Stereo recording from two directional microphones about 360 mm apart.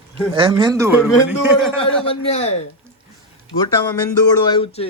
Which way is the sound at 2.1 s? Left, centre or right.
Centre.